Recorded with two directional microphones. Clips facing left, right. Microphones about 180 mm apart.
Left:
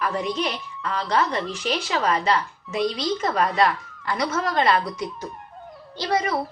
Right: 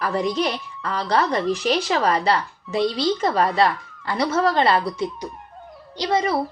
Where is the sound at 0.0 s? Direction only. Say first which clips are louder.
Right 3 dB; 35° right (ahead or behind).